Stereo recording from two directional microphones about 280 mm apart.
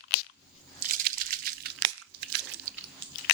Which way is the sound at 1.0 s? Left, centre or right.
Right.